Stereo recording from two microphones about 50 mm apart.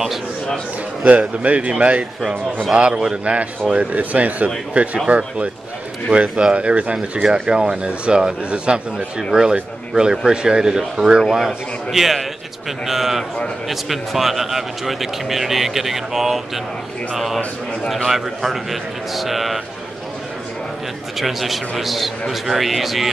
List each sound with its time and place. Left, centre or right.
1.0 s a man's voice: right
3.7 s a man's voice: right; by 19.6 s centre
21.2 s speech: centre